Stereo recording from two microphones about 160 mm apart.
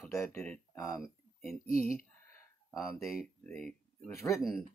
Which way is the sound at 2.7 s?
Centre (ahead or behind).